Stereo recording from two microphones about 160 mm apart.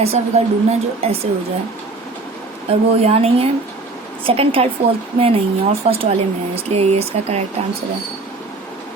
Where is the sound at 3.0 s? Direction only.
40° right (ahead or behind).